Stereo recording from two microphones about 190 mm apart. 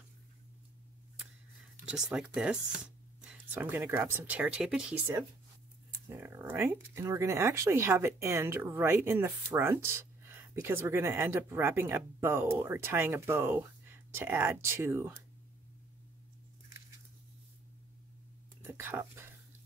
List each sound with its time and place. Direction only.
1.9 s speech: 5° right (ahead or behind)
18.7 s speech: 10° right (ahead or behind)